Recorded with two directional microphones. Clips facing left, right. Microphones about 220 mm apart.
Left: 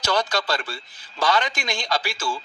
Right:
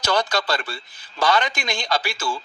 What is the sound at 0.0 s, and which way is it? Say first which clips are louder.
A man's voice: right 1 dB; 60° right (ahead or behind).